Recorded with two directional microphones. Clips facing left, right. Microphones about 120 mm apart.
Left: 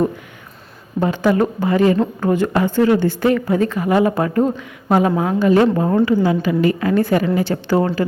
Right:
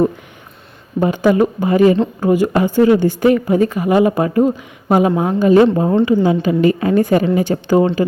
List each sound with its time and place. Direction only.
0.9 s a woman's voice: 15° right (ahead or behind)